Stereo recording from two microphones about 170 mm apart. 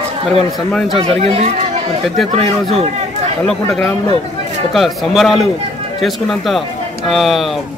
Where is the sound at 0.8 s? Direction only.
35° right (ahead or behind).